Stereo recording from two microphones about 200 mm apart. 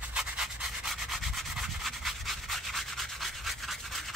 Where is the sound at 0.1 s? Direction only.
5° right (ahead or behind).